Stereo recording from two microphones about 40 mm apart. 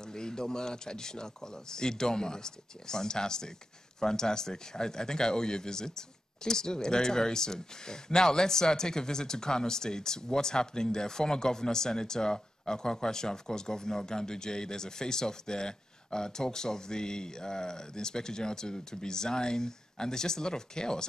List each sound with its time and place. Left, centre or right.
0.0 s speech: centre